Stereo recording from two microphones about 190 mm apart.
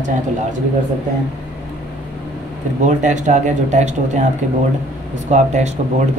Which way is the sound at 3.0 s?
40° right (ahead or behind).